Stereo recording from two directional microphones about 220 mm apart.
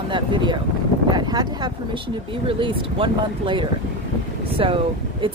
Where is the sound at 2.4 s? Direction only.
25° right (ahead or behind).